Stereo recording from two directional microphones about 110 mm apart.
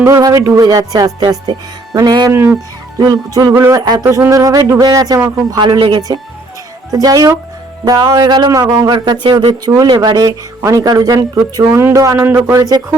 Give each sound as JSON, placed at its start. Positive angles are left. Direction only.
{"t": 0.2, "sound": "speech", "side_deg": -30}
{"t": 2.3, "sound": "speech", "side_deg": -20}
{"t": 3.0, "sound": "speech", "side_deg": -35}
{"t": 12.5, "sound": "speech", "side_deg": -35}